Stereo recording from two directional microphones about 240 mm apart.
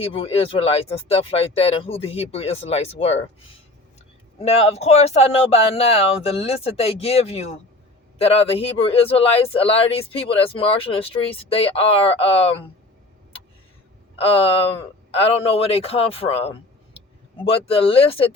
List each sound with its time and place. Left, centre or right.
0.0 s speech: left
4.4 s speech: left
14.2 s speech: left